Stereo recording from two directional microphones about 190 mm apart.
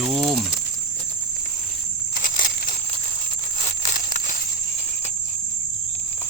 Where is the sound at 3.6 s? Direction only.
40° left (ahead or behind).